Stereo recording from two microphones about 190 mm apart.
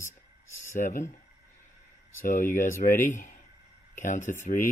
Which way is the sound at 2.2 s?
45° left (ahead or behind).